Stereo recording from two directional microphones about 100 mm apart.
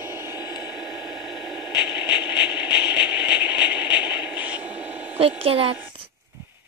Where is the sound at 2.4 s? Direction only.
15° right (ahead or behind).